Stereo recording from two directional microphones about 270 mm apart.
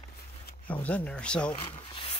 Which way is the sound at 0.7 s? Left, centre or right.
Centre.